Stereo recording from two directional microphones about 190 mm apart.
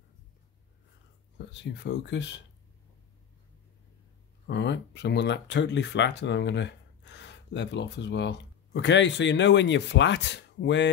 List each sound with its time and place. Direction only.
1.5 s speech: 65° left (ahead or behind)
4.5 s speech: 65° left (ahead or behind)